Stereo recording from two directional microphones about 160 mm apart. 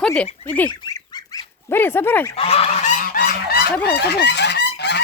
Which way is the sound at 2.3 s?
40° left (ahead or behind).